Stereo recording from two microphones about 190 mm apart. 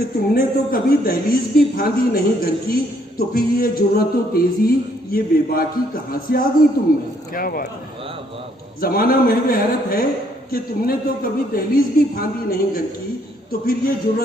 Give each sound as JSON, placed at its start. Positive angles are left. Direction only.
{"t": 0.3, "sound": "speech", "side_deg": 50}
{"t": 8.8, "sound": "speech", "side_deg": 50}